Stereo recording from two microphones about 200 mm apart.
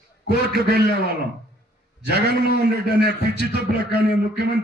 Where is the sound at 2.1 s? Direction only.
55° right (ahead or behind).